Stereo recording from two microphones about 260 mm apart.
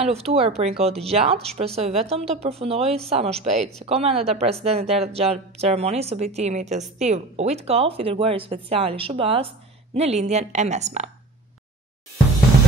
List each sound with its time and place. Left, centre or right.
0.0 s a woman's voice: right